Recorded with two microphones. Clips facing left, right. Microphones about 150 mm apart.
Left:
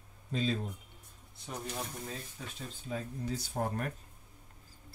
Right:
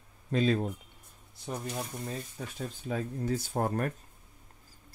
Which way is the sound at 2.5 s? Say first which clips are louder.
Right 5 dB; 55° right (ahead or behind).